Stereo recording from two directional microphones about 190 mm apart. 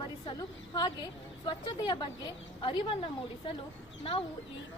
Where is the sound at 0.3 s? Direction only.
20° left (ahead or behind).